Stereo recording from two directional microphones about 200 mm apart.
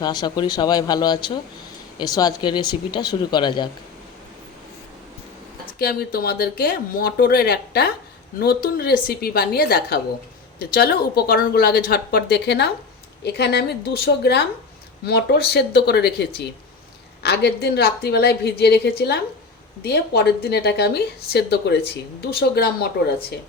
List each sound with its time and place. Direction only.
0.0 s speech: 20° left (ahead or behind)
5.8 s speech: 50° left (ahead or behind)